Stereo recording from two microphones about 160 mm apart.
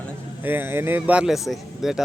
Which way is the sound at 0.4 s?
15° right (ahead or behind).